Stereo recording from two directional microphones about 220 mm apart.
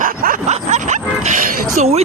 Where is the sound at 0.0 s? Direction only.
35° right (ahead or behind).